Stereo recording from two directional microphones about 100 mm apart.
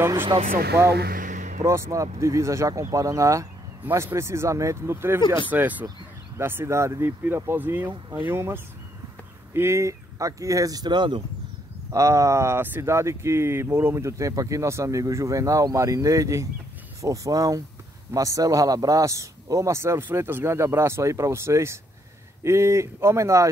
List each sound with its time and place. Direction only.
0.3 s speech: 40° right (ahead or behind)
1.6 s speech: 30° right (ahead or behind); by 11.2 s 50° right (ahead or behind)
11.9 s speech: 30° right (ahead or behind)